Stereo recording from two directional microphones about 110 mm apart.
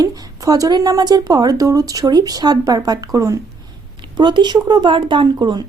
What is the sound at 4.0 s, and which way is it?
Speech, 45° right (ahead or behind).